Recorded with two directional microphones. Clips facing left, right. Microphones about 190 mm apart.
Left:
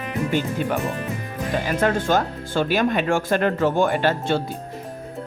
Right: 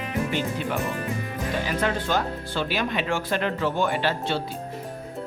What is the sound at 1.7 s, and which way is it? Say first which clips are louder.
Speech: left 7 dB; 45° left (ahead or behind).